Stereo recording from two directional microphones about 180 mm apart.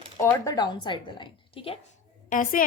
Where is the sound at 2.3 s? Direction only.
45° left (ahead or behind).